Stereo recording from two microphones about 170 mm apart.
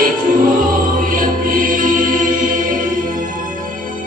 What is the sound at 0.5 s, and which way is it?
Choir, 55° right (ahead or behind).